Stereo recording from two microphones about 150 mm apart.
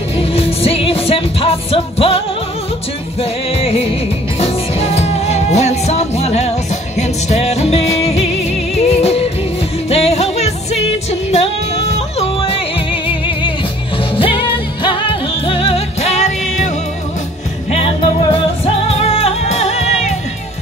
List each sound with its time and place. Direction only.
0.2 s music: 40° left (ahead or behind)